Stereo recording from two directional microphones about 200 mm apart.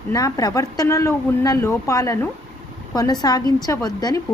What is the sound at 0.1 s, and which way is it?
A woman's voice, 15° left (ahead or behind).